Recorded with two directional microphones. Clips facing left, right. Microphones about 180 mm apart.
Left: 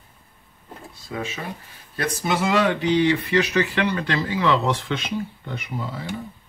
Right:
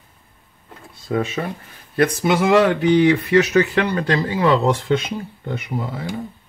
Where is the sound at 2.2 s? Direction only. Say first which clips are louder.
Right 4 dB; 55° right (ahead or behind).